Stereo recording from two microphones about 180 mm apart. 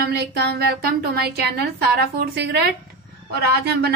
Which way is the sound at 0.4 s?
65° right (ahead or behind).